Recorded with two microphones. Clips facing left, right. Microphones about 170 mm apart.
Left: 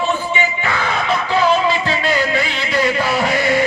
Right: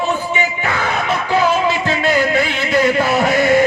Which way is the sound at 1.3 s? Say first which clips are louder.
Even; 45° right (ahead or behind).